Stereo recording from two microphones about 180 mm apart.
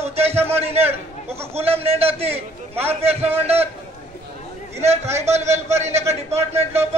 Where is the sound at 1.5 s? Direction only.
35° right (ahead or behind).